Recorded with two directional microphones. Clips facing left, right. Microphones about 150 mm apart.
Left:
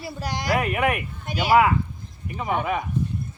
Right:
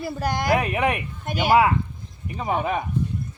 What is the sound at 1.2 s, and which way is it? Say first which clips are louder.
Speech: right 1 dB; 50° right (ahead or behind).